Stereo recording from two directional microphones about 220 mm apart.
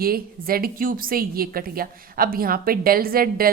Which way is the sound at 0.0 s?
40° right (ahead or behind).